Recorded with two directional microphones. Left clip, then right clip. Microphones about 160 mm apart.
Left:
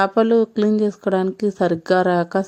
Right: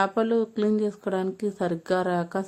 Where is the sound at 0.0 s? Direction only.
35° left (ahead or behind).